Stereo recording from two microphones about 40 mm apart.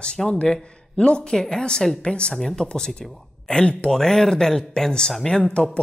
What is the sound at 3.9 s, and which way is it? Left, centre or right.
Speech, centre.